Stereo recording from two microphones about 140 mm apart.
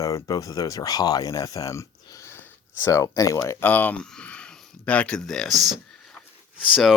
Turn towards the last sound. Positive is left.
turn(degrees=-5)  # may be behind; listen again after turning